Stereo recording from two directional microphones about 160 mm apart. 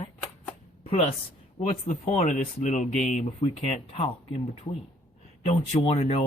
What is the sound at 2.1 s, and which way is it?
Speech, 45° left (ahead or behind).